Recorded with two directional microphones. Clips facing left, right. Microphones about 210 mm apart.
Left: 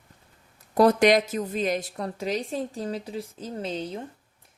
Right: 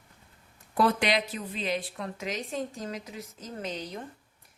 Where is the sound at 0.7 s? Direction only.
40° left (ahead or behind).